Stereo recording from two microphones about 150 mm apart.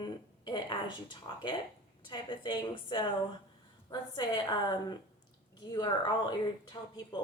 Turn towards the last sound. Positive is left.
turn(degrees=30)  # may be behind; listen again after turning